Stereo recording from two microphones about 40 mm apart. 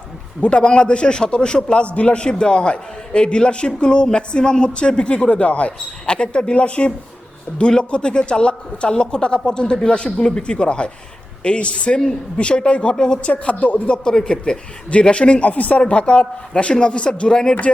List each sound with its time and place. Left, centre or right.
0.4 s speech: left
13.4 s speech: left; by 17.5 s centre